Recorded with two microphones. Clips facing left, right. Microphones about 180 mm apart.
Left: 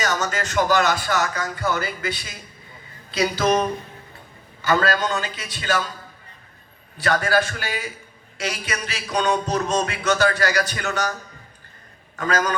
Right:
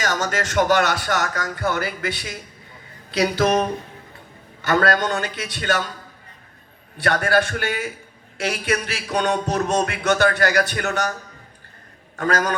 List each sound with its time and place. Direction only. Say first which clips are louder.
0.1 s music: right 1 dB; 55° right (ahead or behind)
6.9 s music: right 1 dB; 60° right (ahead or behind)
12.1 s a man's voice: right 1 dB; 60° right (ahead or behind)